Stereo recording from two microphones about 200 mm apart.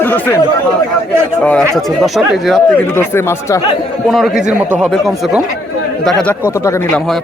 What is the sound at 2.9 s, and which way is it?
Speech, 10° left (ahead or behind).